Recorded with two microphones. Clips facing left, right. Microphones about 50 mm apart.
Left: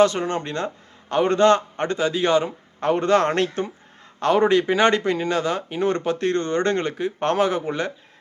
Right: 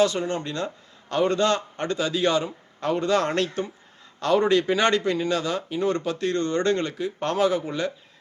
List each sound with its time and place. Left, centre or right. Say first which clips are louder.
0.0 s speech: left 4 dB; left